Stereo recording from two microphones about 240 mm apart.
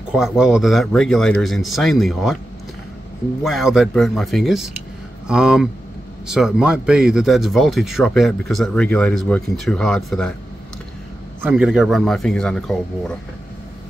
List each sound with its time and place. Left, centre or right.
0.1 s speech: centre
3.4 s speech: centre
11.4 s speech: centre